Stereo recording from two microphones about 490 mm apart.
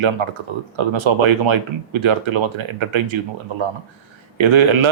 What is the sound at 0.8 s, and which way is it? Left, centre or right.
Speech, right.